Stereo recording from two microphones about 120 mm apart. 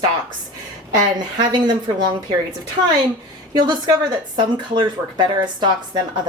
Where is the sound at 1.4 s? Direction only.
35° right (ahead or behind).